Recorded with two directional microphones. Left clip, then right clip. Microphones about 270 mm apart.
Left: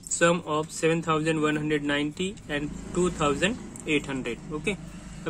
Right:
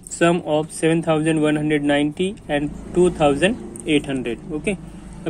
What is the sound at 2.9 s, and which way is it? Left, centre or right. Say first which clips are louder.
Speech: right 9 dB; left.